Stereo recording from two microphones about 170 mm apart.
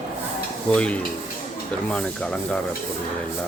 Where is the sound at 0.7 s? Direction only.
5° left (ahead or behind).